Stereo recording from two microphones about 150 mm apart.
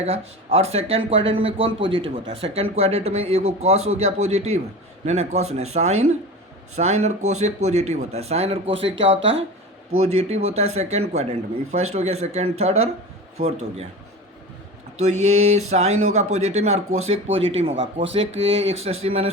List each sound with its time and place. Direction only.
0.0 s speech: 45° right (ahead or behind)
14.9 s speech: 50° right (ahead or behind)